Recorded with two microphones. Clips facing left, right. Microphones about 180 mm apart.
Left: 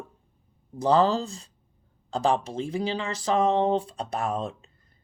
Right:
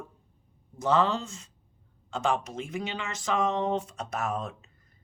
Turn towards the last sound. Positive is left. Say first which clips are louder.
# left 3 dB
turn(degrees=30)  # may be behind; listen again after turning